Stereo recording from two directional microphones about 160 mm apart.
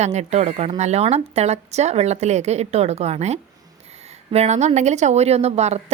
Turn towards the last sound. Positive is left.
turn(degrees=-40)  # may be behind; listen again after turning